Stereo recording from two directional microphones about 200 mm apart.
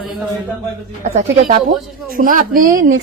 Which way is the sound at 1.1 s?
55° right (ahead or behind).